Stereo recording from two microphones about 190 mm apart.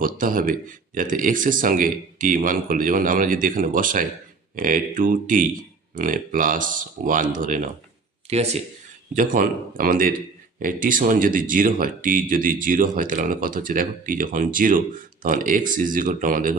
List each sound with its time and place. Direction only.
0.0 s speech: 45° right (ahead or behind)
8.3 s speech: 35° right (ahead or behind)
9.1 s speech: 45° right (ahead or behind)